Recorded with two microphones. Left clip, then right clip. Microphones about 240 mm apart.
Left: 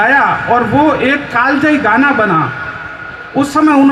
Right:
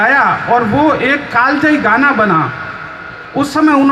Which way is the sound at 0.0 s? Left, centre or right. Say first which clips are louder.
Even; left.